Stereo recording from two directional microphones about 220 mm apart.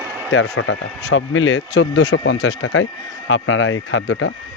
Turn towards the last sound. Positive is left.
turn(degrees=60)  # may be behind; listen again after turning